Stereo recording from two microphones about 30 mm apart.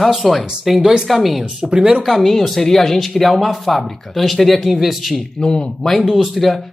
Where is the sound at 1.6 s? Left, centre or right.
Right.